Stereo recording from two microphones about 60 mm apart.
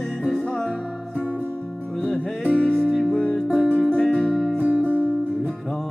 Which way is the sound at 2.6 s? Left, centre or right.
Centre.